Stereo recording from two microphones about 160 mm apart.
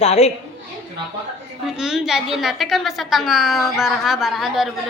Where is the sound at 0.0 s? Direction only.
40° left (ahead or behind).